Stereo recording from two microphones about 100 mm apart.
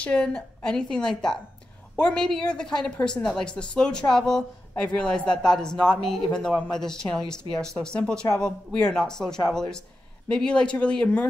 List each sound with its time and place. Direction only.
0.0 s a man's voice: 10° left (ahead or behind)